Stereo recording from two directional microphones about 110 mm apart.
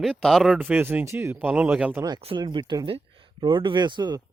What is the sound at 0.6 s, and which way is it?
Speech, 15° right (ahead or behind).